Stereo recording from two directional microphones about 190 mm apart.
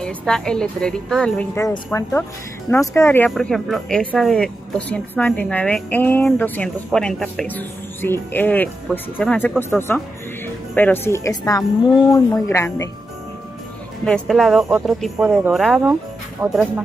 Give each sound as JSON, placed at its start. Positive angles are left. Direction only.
{"t": 0.0, "sound": "a woman's voice", "side_deg": 5}
{"t": 3.3, "sound": "a woman's voice", "side_deg": 0}
{"t": 14.0, "sound": "speech", "side_deg": 0}